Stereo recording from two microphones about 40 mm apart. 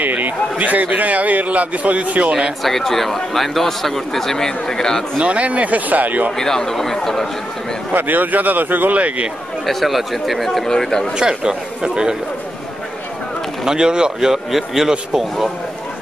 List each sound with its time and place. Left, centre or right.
0.0 s a man's voice: right
2.6 s a man's voice: centre
5.2 s speech: right
6.3 s a man's voice: centre
7.9 s a man's voice: right
9.7 s speech: centre
10.8 s a man's voice: centre
11.1 s speech: centre
13.7 s speech: centre
14.3 s speech: centre